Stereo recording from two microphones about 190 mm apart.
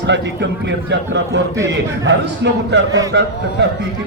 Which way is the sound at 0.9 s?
65° right (ahead or behind).